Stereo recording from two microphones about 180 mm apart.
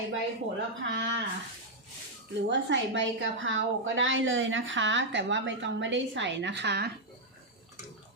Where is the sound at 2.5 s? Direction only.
85° right; by 6.9 s 65° right (ahead or behind).